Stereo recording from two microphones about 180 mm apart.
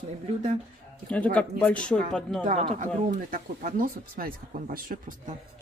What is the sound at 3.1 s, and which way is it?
Speech, 50° right (ahead or behind).